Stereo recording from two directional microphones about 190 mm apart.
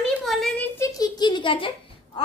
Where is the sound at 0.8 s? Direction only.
20° left (ahead or behind).